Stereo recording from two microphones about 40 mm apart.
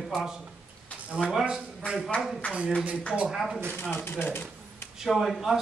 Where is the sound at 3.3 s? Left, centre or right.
Centre.